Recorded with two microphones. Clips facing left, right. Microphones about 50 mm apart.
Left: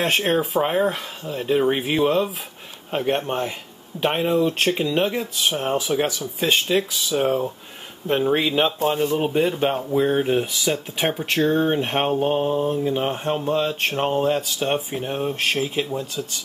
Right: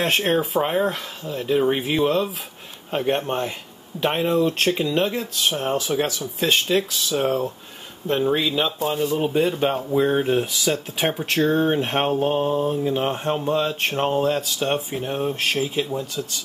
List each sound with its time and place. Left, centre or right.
0.0 s speech: centre
8.3 s speech: left
8.9 s speech: left
9.4 s speech: centre